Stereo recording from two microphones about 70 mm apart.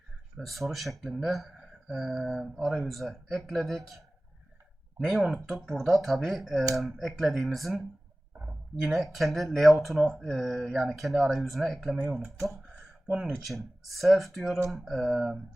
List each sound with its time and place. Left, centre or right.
0.3 s speech: centre
4.9 s speech: centre